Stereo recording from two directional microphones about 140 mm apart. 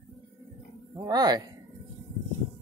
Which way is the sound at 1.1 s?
30° right (ahead or behind).